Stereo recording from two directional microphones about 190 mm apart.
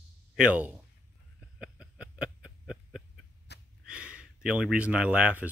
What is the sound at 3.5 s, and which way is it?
Gasp, 65° left (ahead or behind).